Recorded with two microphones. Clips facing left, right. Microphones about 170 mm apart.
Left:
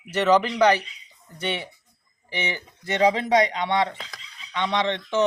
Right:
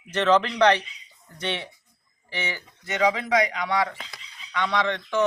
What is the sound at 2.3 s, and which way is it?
Speech, 15° left (ahead or behind).